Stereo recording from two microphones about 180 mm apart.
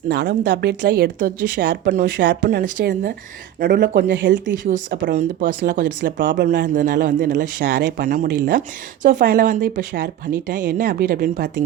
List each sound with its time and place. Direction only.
0.1 s speech: 80° right
4.9 s speech: 50° right (ahead or behind)
6.0 s speech: 85° right
6.7 s speech: 45° right (ahead or behind)
7.3 s speech: 75° right (ahead or behind)
7.9 s speech: 50° right (ahead or behind)